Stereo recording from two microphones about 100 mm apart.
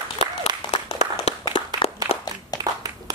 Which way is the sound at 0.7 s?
85° left.